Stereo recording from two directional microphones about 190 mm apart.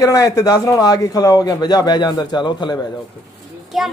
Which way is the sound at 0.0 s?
20° left (ahead or behind).